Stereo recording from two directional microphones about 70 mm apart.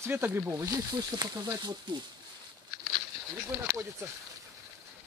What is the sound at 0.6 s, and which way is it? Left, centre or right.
Speech, right.